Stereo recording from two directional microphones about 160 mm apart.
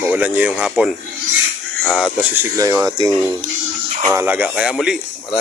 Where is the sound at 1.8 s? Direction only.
10° left (ahead or behind).